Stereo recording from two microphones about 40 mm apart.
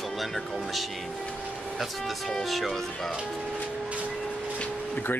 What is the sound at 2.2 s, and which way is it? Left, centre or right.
Speech, centre.